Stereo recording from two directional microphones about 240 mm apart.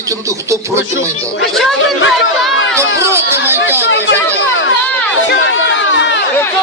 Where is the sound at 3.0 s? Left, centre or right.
Centre.